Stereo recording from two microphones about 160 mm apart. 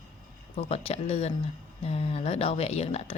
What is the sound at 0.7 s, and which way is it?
A woman's voice, 40° left (ahead or behind).